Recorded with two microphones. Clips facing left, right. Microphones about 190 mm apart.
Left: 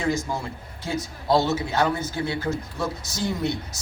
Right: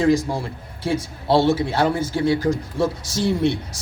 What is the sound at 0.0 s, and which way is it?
A man's voice, 30° right (ahead or behind).